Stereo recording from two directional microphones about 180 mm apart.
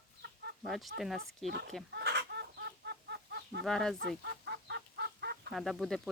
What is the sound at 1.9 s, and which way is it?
Chicken, 70° right (ahead or behind).